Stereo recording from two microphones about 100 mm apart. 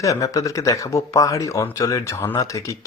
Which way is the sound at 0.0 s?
35° left (ahead or behind).